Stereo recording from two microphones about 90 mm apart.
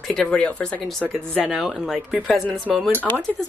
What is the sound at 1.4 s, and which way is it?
Speech, 5° right (ahead or behind).